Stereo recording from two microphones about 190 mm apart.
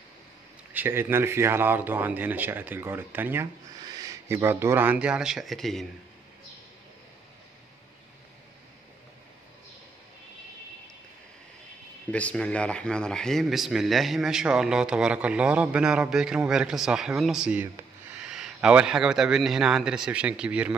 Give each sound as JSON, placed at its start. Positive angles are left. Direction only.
{"t": 0.7, "sound": "speech", "side_deg": -10}
{"t": 12.1, "sound": "speech", "side_deg": 5}